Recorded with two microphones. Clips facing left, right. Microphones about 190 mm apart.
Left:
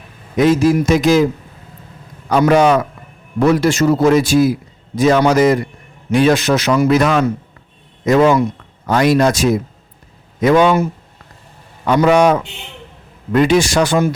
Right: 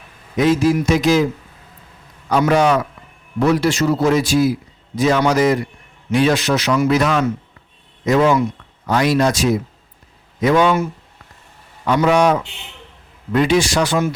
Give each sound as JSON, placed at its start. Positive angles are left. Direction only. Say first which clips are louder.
{"t": 0.3, "sound": "a man's voice", "louder": "left 3 dB", "side_deg": 50}
{"t": 2.5, "sound": "a man's voice", "louder": "left 4 dB", "side_deg": 50}
{"t": 12.0, "sound": "a man's voice", "louder": "left 3 dB", "side_deg": 55}